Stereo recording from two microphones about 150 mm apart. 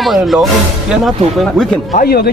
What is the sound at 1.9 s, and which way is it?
Speech, 90° left.